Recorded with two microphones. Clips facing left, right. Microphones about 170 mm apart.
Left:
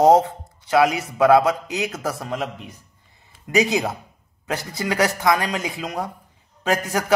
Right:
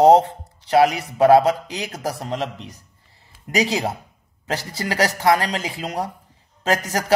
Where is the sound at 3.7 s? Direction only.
30° right (ahead or behind).